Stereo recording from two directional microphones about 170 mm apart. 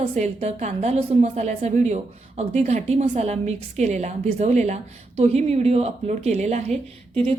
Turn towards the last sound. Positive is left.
turn(degrees=-35)  # may be behind; listen again after turning